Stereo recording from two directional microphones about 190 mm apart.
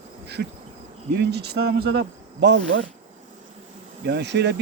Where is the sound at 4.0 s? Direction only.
65° right (ahead or behind).